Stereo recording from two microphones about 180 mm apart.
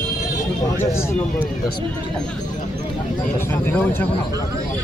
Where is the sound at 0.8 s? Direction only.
10° left (ahead or behind).